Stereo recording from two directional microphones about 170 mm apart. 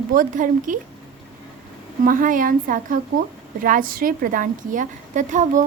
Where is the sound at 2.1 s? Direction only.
55° right (ahead or behind).